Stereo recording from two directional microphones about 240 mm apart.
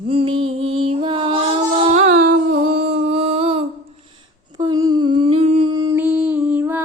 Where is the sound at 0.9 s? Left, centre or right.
Right.